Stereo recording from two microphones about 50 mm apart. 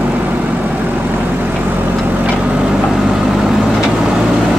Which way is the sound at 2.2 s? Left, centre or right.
Right.